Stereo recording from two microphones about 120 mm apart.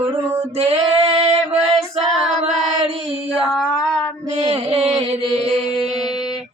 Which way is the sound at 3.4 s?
5° left (ahead or behind).